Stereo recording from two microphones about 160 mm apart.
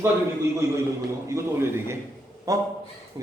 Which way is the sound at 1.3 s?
15° right (ahead or behind).